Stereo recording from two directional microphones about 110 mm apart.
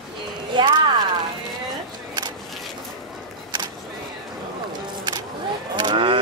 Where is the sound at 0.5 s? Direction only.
50° right (ahead or behind).